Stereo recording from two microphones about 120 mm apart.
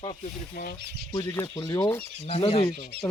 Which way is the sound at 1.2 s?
20° left (ahead or behind).